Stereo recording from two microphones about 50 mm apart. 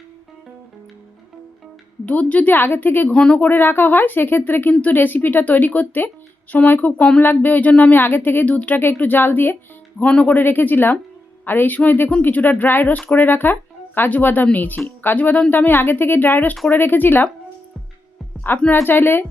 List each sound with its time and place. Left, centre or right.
2.0 s speech: left
2.6 s speech: left
3.1 s speech: left
3.4 s speech: left
4.7 s speech: left
10.0 s speech: left
10.2 s speech: left
18.7 s speech: left